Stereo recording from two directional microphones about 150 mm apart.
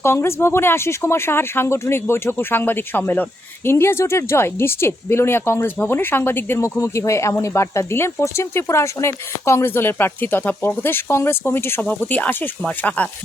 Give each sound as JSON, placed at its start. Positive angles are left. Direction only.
{"t": 0.0, "sound": "speech", "side_deg": 15}